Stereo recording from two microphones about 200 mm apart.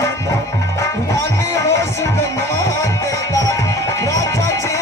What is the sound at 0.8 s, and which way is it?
Music, 15° left (ahead or behind).